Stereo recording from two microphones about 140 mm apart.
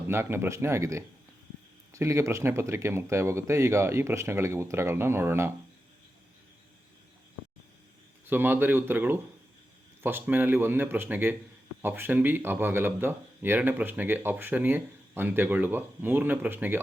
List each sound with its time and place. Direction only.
0.1 s speech: 15° right (ahead or behind)
8.3 s speech: 15° right (ahead or behind)